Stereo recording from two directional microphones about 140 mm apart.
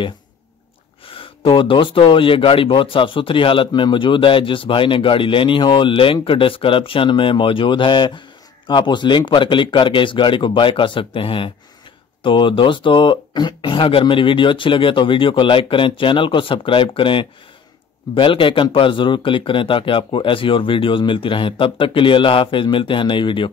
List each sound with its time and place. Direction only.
1.0 s speech: 40° left (ahead or behind)